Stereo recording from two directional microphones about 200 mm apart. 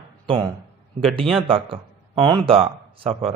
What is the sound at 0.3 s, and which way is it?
Speech, 25° right (ahead or behind).